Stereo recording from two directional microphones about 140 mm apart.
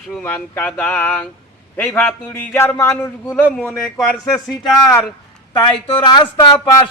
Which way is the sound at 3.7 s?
Centre (ahead or behind).